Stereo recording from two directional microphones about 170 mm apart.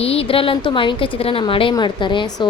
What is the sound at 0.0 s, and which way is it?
A woman's voice, 35° left (ahead or behind).